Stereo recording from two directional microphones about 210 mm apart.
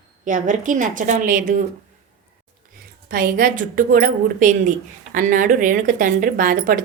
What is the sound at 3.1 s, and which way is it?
Speech, 40° right (ahead or behind).